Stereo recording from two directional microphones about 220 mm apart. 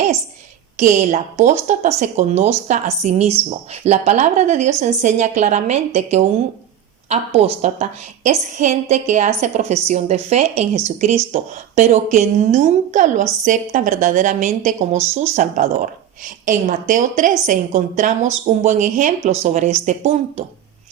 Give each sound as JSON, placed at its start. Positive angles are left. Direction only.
{"t": 0.8, "sound": "speech", "side_deg": -30}